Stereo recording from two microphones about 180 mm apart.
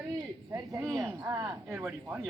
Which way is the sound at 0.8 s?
Centre (ahead or behind).